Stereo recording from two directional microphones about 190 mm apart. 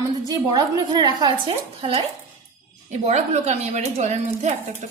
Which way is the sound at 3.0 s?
35° right (ahead or behind).